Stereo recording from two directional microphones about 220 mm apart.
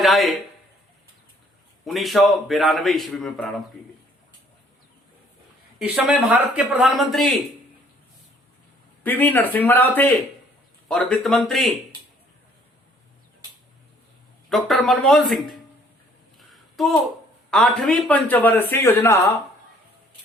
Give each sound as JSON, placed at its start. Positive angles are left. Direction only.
{"t": 0.0, "sound": "a man's voice", "side_deg": 0}
{"t": 1.8, "sound": "a man's voice", "side_deg": 0}
{"t": 5.8, "sound": "a man's voice", "side_deg": -5}
{"t": 9.0, "sound": "a man's voice", "side_deg": 10}
{"t": 14.5, "sound": "a man's voice", "side_deg": 0}
{"t": 16.5, "sound": "a sound", "side_deg": 0}
{"t": 17.5, "sound": "a man's voice", "side_deg": 0}